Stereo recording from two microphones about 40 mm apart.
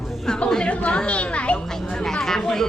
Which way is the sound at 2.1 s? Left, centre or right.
Centre.